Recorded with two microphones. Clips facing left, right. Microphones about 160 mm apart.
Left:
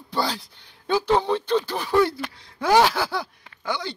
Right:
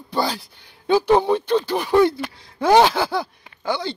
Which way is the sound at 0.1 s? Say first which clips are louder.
Right 3 dB; 15° right (ahead or behind).